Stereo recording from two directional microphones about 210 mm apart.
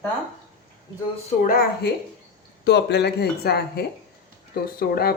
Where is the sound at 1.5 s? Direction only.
45° left (ahead or behind).